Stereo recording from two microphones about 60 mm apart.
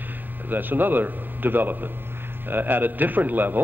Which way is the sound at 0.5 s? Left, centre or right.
Right.